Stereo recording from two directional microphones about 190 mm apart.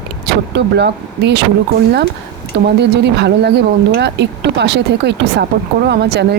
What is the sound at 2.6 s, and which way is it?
Speech, 60° right (ahead or behind).